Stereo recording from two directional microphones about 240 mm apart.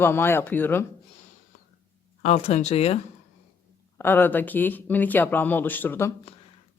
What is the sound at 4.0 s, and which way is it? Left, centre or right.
A woman's voice, centre.